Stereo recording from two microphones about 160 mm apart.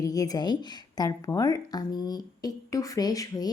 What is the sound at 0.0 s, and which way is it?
A woman's voice, 20° left (ahead or behind).